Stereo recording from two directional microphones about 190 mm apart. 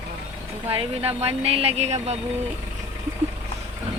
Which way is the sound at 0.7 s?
30° right (ahead or behind).